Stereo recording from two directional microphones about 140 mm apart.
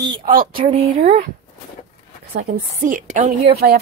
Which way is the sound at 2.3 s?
80° right.